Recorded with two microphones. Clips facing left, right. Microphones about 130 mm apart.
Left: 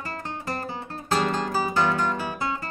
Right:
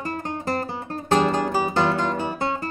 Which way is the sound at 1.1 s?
20° right (ahead or behind).